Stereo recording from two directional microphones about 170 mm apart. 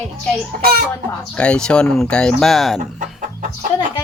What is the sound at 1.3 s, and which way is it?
Speech, 5° left (ahead or behind).